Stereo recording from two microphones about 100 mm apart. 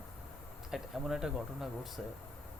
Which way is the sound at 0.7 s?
5° right (ahead or behind).